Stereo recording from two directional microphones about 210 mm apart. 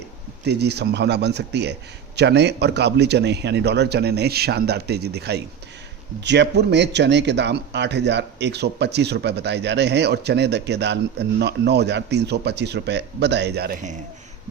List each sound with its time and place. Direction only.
0.4 s speech: 50° right (ahead or behind)